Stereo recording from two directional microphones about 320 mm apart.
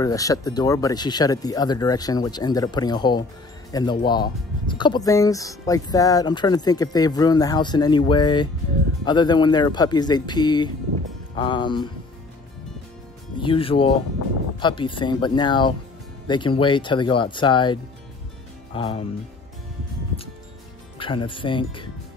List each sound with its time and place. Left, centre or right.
0.0 s speech: centre
13.4 s speech: centre
21.0 s speech: centre